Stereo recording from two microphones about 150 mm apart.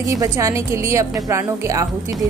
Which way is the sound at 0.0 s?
20° right (ahead or behind).